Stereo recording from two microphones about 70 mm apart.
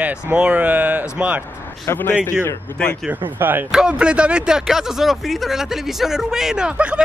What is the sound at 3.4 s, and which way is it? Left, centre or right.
Speech, right.